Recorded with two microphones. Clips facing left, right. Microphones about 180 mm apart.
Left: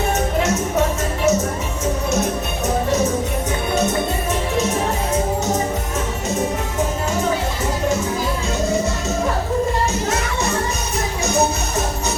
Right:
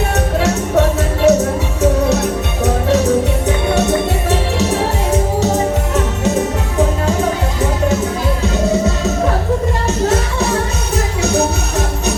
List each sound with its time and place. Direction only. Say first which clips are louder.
0.4 s music: right 4 dB; 70° right (ahead or behind)
10.9 s music: right 4 dB; 70° right (ahead or behind)